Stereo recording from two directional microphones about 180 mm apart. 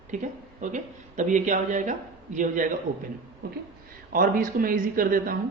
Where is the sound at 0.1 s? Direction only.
45° right (ahead or behind).